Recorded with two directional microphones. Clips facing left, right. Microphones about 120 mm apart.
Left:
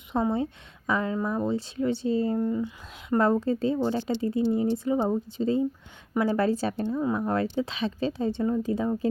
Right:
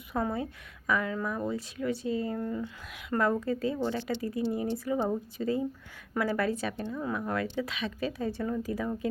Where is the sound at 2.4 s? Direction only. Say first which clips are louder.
Left 6 dB; 20° left (ahead or behind).